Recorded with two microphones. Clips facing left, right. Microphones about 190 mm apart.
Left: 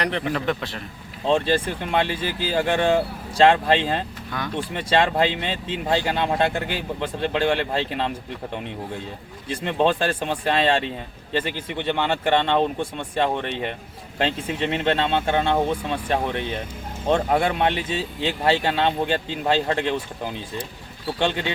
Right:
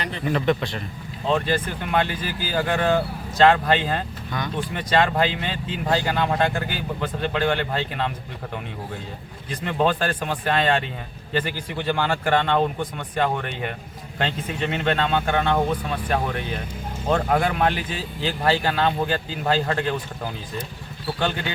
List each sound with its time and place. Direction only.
0.3 s speech: centre (ahead or behind)
1.3 s speech: 30° left (ahead or behind)
4.3 s speech: 5° left (ahead or behind)
4.7 s speech: 25° left (ahead or behind)
9.6 s speech: 30° left (ahead or behind)
21.2 s speech: 25° left (ahead or behind)